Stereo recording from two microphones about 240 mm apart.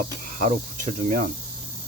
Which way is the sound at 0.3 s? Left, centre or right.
Right.